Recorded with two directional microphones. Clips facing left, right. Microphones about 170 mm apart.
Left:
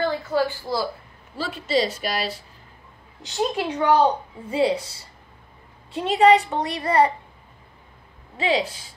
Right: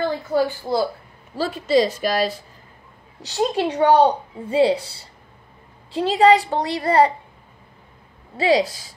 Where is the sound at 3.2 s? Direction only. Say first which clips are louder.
Right 3 dB; 35° right (ahead or behind).